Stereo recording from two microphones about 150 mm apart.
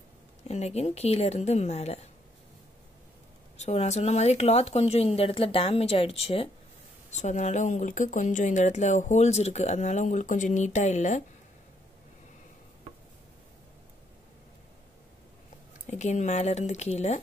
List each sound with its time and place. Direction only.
0.4 s speech: 45° left (ahead or behind)
3.5 s speech: 50° left (ahead or behind)
7.1 s speech: 50° left (ahead or behind)
15.9 s speech: 50° left (ahead or behind)